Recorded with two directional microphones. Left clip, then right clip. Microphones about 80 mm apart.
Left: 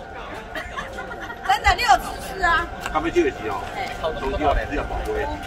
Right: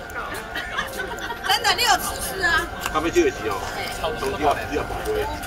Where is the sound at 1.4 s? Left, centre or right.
Left.